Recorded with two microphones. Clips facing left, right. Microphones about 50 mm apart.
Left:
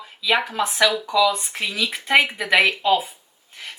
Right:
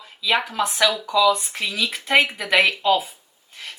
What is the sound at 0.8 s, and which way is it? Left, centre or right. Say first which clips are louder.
Speech: left 2 dB; centre.